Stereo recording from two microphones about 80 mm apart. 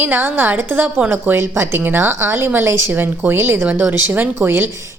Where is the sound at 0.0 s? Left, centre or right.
Right.